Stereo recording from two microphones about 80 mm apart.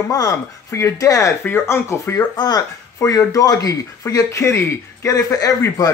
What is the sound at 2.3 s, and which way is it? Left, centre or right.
Speech, left.